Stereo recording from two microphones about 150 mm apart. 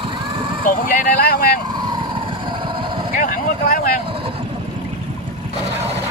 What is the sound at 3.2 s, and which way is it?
Speech, 65° left (ahead or behind).